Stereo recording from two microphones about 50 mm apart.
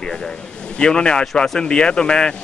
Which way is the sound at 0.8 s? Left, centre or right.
Centre.